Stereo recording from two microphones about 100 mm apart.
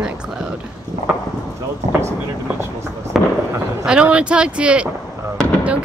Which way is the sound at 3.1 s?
Centre (ahead or behind).